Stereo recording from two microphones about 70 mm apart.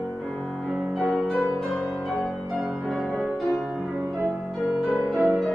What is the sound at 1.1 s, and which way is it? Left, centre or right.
Music, centre.